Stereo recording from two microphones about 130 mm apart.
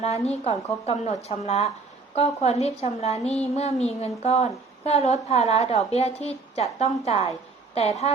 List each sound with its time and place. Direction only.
0.0 s a woman's voice: 55° left (ahead or behind)